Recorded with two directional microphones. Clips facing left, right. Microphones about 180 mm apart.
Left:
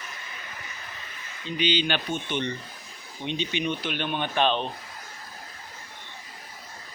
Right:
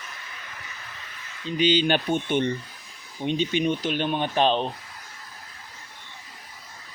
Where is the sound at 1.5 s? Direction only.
40° right (ahead or behind).